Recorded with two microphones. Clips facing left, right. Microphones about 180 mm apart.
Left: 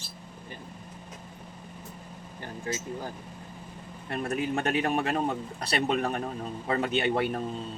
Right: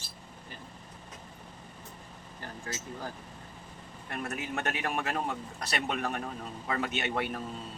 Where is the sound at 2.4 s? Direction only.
20° left (ahead or behind).